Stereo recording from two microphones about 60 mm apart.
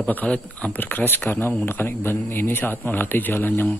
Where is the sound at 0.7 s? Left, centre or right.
Left.